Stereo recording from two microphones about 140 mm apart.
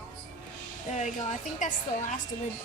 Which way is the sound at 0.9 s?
55° left (ahead or behind).